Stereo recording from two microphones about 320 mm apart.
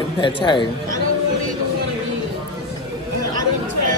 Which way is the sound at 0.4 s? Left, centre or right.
Centre.